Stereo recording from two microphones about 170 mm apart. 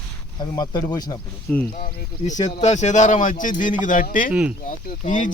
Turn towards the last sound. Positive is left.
turn(degrees=45)  # may be behind; listen again after turning